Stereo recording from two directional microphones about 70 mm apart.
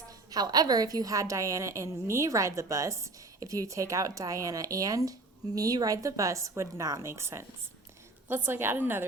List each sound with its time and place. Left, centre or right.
0.3 s a woman's voice: right